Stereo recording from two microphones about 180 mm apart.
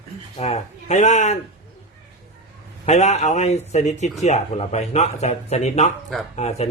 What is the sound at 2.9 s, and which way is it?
Speech, 40° left (ahead or behind).